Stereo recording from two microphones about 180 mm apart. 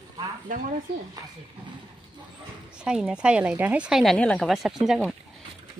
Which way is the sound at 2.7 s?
5° right (ahead or behind).